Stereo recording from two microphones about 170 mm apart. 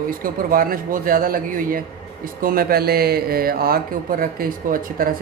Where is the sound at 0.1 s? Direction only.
55° right (ahead or behind).